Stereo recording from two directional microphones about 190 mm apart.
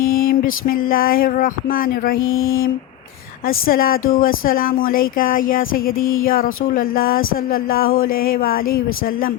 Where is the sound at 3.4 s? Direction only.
50° left (ahead or behind).